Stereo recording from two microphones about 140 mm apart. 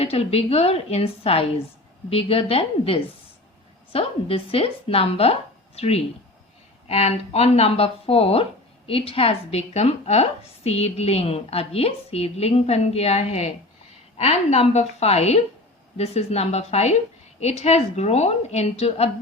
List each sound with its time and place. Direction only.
0.0 s a woman's voice: 45° left (ahead or behind)